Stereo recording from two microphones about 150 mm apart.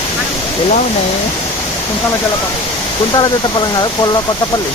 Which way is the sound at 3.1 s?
30° left (ahead or behind).